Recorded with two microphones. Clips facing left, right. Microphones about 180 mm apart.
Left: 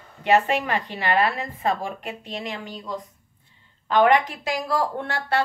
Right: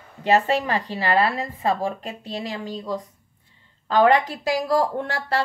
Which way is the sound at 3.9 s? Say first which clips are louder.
Right 1 dB; 35° right (ahead or behind).